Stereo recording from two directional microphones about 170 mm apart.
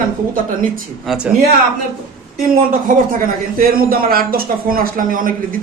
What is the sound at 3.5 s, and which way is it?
Speech, 60° right (ahead or behind).